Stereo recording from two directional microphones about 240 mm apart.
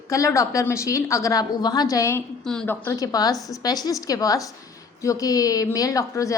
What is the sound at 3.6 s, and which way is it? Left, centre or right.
A woman's voice, centre.